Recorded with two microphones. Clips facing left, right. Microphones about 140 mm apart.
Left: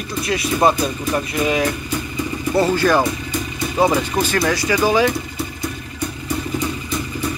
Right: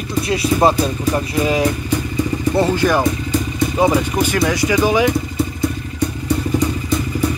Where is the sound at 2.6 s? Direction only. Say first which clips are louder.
Left 1 dB; 15° right (ahead or behind).